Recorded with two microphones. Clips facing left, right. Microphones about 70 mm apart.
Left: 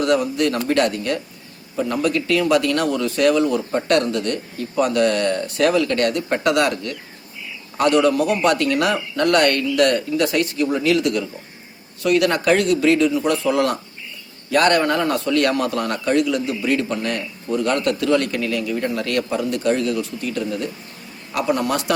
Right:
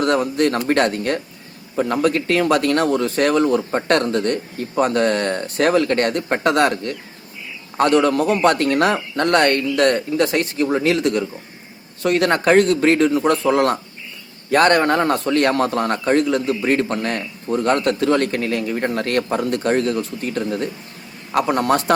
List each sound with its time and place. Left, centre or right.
0.0 s a man's voice: right